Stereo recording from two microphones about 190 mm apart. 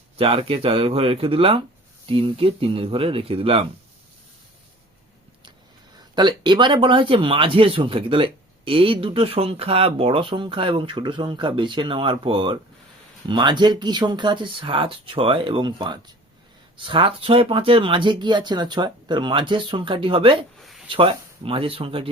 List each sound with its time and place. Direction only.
0.2 s speech: 30° right (ahead or behind)
6.0 s speech: 25° right (ahead or behind)
20.6 s a sound: centre (ahead or behind)
20.8 s speech: 25° right (ahead or behind)